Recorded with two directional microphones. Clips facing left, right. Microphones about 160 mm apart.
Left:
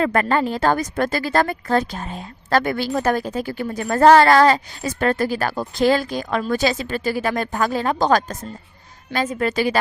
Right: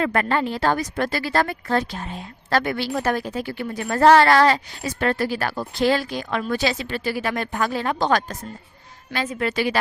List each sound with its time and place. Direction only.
0.0 s speech: 40° left (ahead or behind)